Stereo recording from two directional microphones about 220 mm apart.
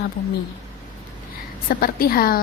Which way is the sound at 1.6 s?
40° left (ahead or behind).